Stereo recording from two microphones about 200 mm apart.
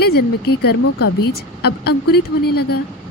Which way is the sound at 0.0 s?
55° left (ahead or behind).